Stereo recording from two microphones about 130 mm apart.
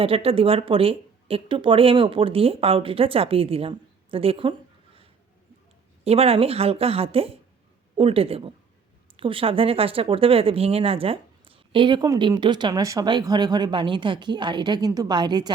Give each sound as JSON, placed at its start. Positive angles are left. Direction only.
{"t": 0.0, "sound": "speech", "side_deg": -45}
{"t": 6.1, "sound": "speech", "side_deg": -50}